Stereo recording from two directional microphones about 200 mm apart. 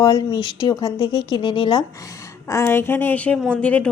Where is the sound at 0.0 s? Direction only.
25° left (ahead or behind).